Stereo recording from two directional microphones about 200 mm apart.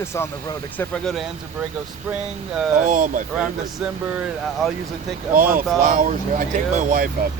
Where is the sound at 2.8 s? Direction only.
40° right (ahead or behind).